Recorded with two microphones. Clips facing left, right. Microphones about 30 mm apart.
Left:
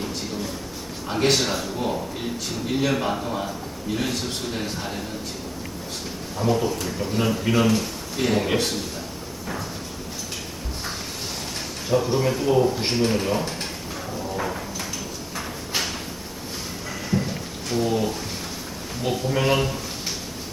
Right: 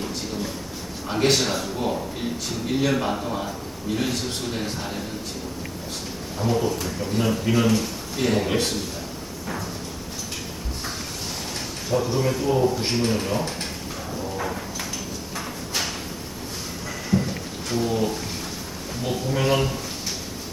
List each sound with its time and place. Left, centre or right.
1.0 s a man's voice: centre
6.4 s a man's voice: centre
11.9 s a man's voice: centre
14.3 s a sound: centre
17.1 s rain: centre
19.0 s a sound: centre